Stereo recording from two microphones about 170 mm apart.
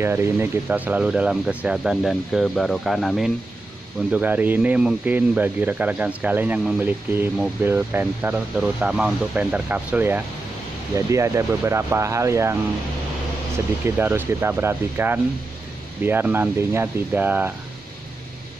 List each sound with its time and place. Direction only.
0.0 s a man's voice: 15° right (ahead or behind)
13.8 s a man's voice: 10° right (ahead or behind)